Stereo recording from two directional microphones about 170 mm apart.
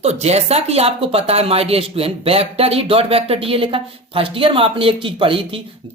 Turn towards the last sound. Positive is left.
turn(degrees=-30)  # may be behind; listen again after turning